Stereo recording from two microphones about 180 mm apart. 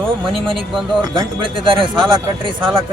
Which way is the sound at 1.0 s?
25° right (ahead or behind).